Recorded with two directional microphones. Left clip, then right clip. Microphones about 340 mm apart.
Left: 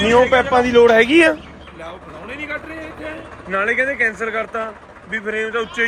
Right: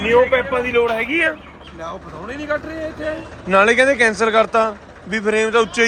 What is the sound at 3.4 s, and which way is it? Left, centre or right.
A man's voice, centre.